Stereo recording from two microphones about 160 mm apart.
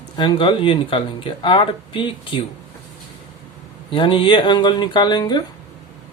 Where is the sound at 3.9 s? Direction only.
30° left (ahead or behind).